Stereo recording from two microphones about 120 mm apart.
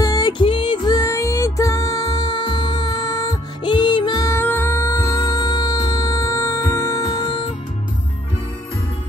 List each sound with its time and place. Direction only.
0.0 s music: 30° left (ahead or behind)
0.9 s music: 25° left (ahead or behind)